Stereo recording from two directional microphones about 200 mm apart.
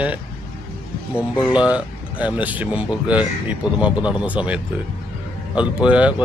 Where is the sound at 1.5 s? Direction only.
5° right (ahead or behind).